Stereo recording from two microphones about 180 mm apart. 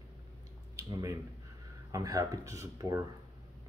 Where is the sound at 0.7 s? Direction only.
20° right (ahead or behind).